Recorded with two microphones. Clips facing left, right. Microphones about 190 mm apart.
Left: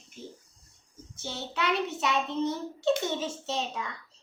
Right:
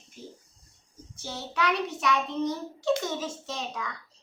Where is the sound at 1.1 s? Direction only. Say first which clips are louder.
Right 1 dB; 25° left (ahead or behind).